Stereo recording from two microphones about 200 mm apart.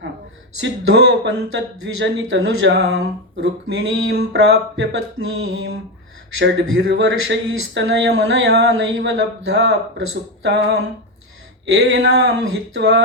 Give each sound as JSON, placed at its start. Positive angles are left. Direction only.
{"t": 0.6, "sound": "speech", "side_deg": -65}
{"t": 6.4, "sound": "speech", "side_deg": -60}
{"t": 11.6, "sound": "speech", "side_deg": -75}